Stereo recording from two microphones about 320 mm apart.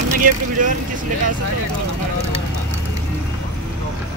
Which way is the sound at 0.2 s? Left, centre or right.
Right.